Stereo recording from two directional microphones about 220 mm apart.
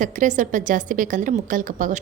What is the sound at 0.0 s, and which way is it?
A woman's voice, 35° right (ahead or behind).